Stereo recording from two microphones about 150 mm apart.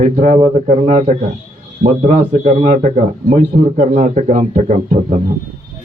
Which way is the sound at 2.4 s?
50° right (ahead or behind).